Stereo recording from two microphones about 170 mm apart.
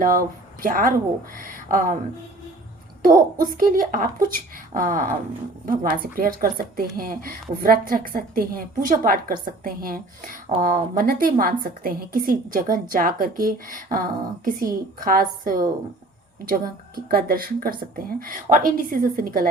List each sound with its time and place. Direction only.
0.0 s speech: 55° right (ahead or behind)
3.1 s a woman's voice: 55° right (ahead or behind)